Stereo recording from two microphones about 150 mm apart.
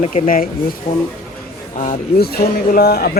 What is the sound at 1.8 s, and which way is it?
Speech, 75° left (ahead or behind).